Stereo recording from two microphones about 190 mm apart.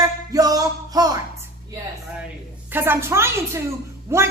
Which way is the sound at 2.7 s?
10° right (ahead or behind).